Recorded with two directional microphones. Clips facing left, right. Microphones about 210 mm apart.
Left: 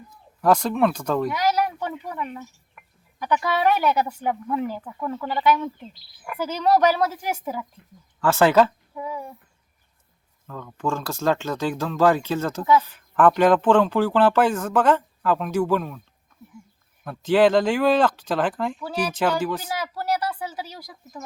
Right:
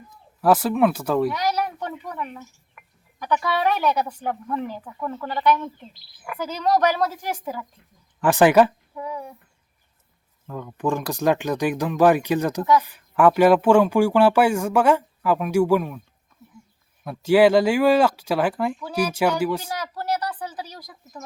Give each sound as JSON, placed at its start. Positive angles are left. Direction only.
{"t": 0.4, "sound": "speech", "side_deg": -5}
{"t": 1.3, "sound": "a woman's voice", "side_deg": 5}
{"t": 8.2, "sound": "speech", "side_deg": -15}
{"t": 9.0, "sound": "a woman's voice", "side_deg": 5}
{"t": 10.4, "sound": "speech", "side_deg": -15}
{"t": 17.0, "sound": "speech", "side_deg": -10}
{"t": 19.6, "sound": "a woman's voice", "side_deg": 10}